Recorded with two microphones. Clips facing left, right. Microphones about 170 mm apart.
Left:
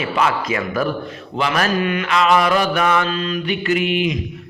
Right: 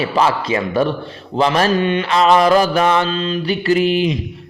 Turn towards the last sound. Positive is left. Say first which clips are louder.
# right 4 dB
turn(degrees=-35)  # may be behind; listen again after turning